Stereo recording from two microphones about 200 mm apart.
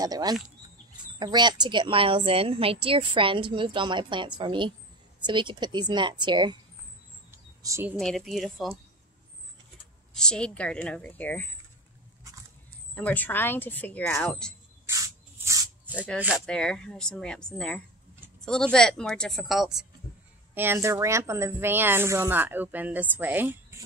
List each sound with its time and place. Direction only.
0.0 s a woman's voice: 20° right (ahead or behind)
7.2 s bird: 15° right (ahead or behind)
8.0 s speech: centre (ahead or behind)
10.1 s speech: 5° left (ahead or behind)
12.9 s speech: 10° left (ahead or behind)
14.9 s rub: 15° right (ahead or behind)
16.2 s speech: 5° right (ahead or behind)
20.5 s a woman's voice: 10° right (ahead or behind)